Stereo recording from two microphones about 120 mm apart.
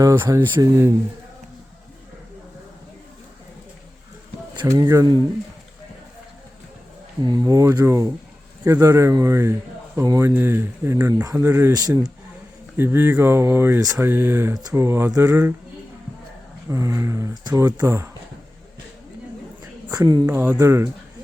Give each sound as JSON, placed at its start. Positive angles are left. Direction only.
{"t": 0.0, "sound": "a man's voice", "side_deg": -25}
{"t": 4.5, "sound": "speech", "side_deg": -30}
{"t": 7.3, "sound": "a man's voice", "side_deg": -30}
{"t": 11.1, "sound": "speech", "side_deg": -35}
{"t": 11.3, "sound": "a man's voice", "side_deg": -20}
{"t": 11.7, "sound": "speech", "side_deg": -35}
{"t": 12.7, "sound": "a man's voice", "side_deg": -20}
{"t": 14.5, "sound": "a man's voice", "side_deg": -30}
{"t": 16.6, "sound": "a man's voice", "side_deg": -25}
{"t": 17.8, "sound": "a man's voice", "side_deg": -20}
{"t": 19.9, "sound": "a woman's voice", "side_deg": -35}
{"t": 20.2, "sound": "a man's voice", "side_deg": -15}